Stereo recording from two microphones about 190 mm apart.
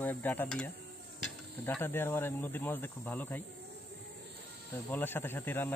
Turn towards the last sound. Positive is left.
turn(degrees=10)  # may be behind; listen again after turning